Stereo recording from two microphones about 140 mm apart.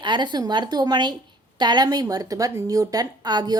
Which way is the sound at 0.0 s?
35° right (ahead or behind).